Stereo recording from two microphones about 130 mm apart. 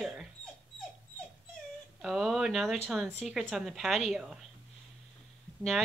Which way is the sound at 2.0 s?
5° right (ahead or behind).